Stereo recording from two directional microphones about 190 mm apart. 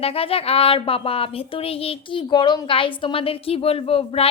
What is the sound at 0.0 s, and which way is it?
Speech, 30° left (ahead or behind).